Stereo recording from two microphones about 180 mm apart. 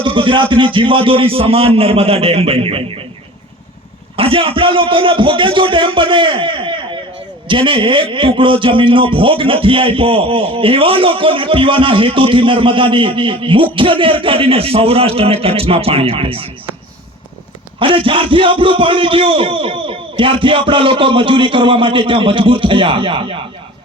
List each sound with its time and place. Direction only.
0.0 s a man's voice: 25° right (ahead or behind)
4.2 s a man's voice: 30° right (ahead or behind)
17.7 s a man's voice: 30° right (ahead or behind)